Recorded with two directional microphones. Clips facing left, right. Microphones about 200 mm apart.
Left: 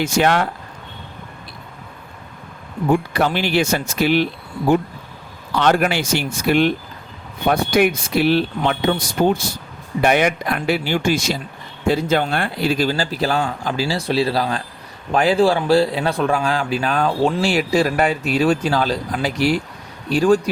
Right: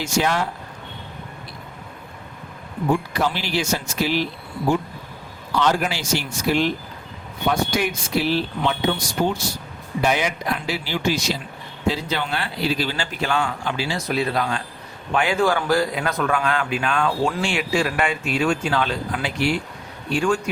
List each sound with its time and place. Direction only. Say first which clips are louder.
0.0 s speech: left 5 dB; 65° left (ahead or behind)
3.2 s speech: left 5 dB; 60° left (ahead or behind)
5.5 s a man's voice: left 4 dB; 60° left (ahead or behind); by 20.4 s 35° left (ahead or behind)